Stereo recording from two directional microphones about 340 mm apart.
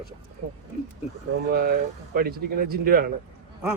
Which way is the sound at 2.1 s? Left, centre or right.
Right.